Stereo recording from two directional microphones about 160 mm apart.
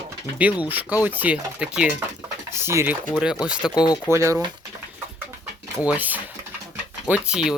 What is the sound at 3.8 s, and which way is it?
Speech, 25° left (ahead or behind).